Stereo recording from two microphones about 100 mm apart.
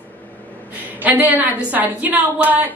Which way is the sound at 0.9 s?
15° right (ahead or behind).